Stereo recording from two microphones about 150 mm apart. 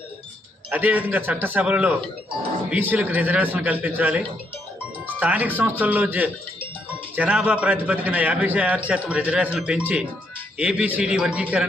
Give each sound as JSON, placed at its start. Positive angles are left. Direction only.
{"t": 0.7, "sound": "a man's voice", "side_deg": -10}
{"t": 5.0, "sound": "music", "side_deg": -10}
{"t": 5.5, "sound": "a man's voice", "side_deg": -10}